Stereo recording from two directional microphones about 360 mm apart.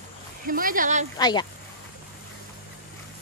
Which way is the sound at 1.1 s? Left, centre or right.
Centre.